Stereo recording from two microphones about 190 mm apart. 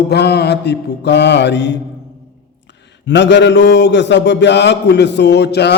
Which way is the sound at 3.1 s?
70° left (ahead or behind).